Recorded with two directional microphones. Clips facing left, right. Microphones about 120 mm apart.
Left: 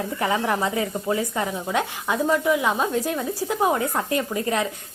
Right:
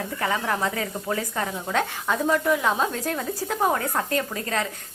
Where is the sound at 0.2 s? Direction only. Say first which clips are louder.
Left 2 dB; 15° left (ahead or behind).